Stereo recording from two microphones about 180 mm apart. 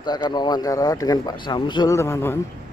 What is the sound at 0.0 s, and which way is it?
Speech, 25° left (ahead or behind).